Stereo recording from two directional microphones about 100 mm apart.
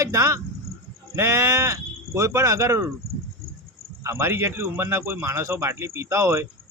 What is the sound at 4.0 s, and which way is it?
A man's voice, 30° right (ahead or behind).